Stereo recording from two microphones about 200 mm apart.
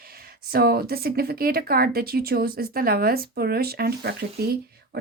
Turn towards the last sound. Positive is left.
turn(degrees=-55)  # may be behind; listen again after turning